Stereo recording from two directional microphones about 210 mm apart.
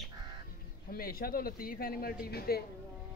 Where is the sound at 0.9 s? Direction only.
45° left (ahead or behind).